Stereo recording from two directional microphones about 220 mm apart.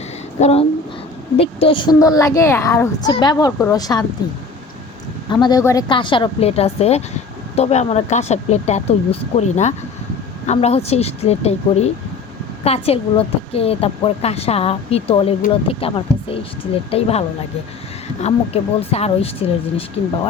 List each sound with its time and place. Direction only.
0.3 s a woman's voice: 30° left (ahead or behind)
5.3 s a woman's voice: 20° left (ahead or behind)